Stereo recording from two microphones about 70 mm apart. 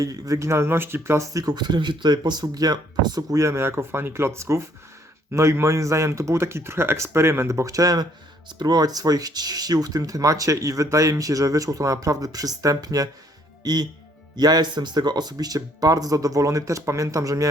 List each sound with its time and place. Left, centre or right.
0.0 s speech: right
1.3 s speech: right
1.5 s speech: right
3.3 s speech: right
8.4 s speech: right
13.6 s speech: right